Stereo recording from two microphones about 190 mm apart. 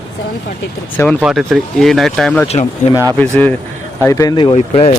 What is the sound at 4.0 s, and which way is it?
Speech, 15° left (ahead or behind).